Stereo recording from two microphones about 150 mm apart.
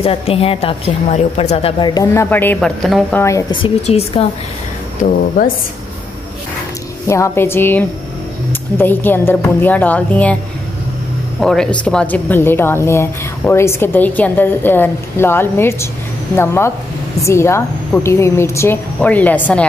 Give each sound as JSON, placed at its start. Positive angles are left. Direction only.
{"t": 0.0, "sound": "a woman's voice", "side_deg": 40}
{"t": 1.8, "sound": "speech", "side_deg": 25}
{"t": 2.2, "sound": "speech", "side_deg": 15}
{"t": 3.2, "sound": "speech", "side_deg": 20}
{"t": 3.8, "sound": "a woman's voice", "side_deg": 45}
{"t": 7.1, "sound": "speech", "side_deg": 15}
{"t": 11.3, "sound": "speech", "side_deg": 5}